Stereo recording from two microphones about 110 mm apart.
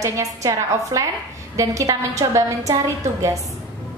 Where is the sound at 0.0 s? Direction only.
30° right (ahead or behind).